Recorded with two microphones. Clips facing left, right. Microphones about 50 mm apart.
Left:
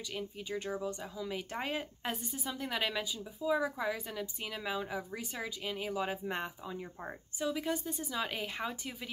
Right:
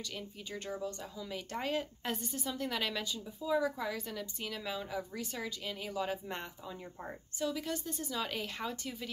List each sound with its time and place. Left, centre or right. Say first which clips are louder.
0.1 s speech: left 4 dB; centre
2.1 s speech: right 1 dB; centre